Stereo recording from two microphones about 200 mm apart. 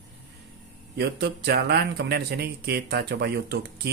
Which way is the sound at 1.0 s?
55° right (ahead or behind).